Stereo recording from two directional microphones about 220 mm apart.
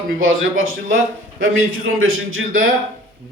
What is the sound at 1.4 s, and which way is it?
A man's voice, 65° right (ahead or behind).